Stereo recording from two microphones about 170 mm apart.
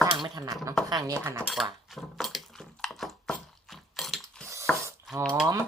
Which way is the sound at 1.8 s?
Centre (ahead or behind).